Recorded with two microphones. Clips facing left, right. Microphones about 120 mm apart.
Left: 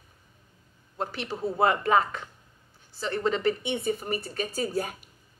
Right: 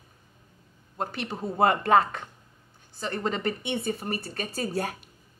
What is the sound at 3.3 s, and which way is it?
Speech, 50° right (ahead or behind).